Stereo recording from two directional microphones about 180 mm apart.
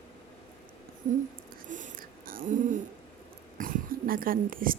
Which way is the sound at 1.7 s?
50° right (ahead or behind).